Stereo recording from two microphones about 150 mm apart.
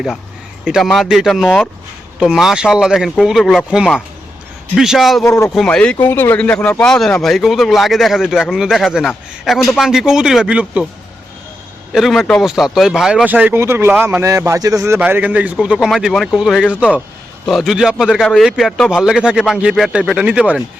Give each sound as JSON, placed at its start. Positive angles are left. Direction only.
{"t": 0.6, "sound": "speech", "side_deg": 0}
{"t": 5.2, "sound": "speech", "side_deg": 20}
{"t": 5.5, "sound": "speech", "side_deg": 5}
{"t": 11.9, "sound": "speech", "side_deg": 0}